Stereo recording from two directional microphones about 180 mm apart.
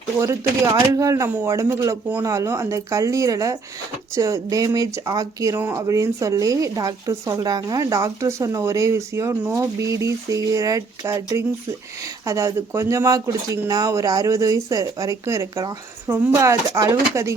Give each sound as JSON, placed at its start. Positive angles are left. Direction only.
{"t": 0.2, "sound": "speech", "side_deg": -15}